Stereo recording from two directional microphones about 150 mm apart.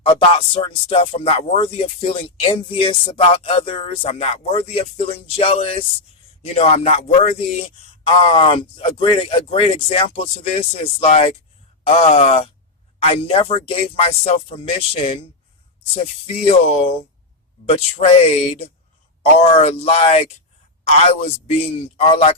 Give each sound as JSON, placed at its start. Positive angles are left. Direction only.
{"t": 0.0, "sound": "speech", "side_deg": 40}
{"t": 16.2, "sound": "speech", "side_deg": 45}
{"t": 17.7, "sound": "speech", "side_deg": 45}